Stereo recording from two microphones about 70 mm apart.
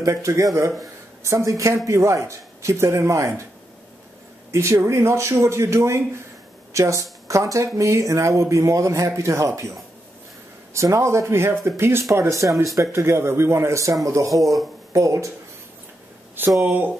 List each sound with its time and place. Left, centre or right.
0.0 s speech: right
4.5 s speech: right
16.6 s speech: right